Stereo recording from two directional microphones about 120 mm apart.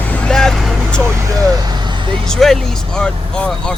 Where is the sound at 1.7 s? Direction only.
40° right (ahead or behind).